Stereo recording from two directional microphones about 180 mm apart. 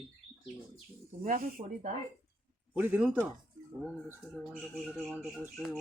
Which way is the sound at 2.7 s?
10° right (ahead or behind).